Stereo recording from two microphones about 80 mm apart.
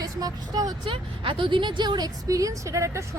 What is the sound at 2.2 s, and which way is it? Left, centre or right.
Speech, right.